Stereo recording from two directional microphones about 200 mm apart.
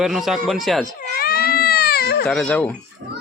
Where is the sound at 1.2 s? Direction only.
50° left (ahead or behind).